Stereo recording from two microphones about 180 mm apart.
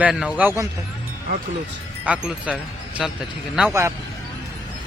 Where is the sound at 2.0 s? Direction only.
5° right (ahead or behind).